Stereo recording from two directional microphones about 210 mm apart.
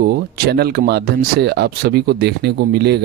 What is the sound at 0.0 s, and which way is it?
Speech, 50° right (ahead or behind).